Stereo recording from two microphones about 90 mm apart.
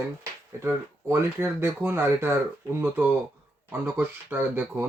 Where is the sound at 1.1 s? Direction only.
30° right (ahead or behind).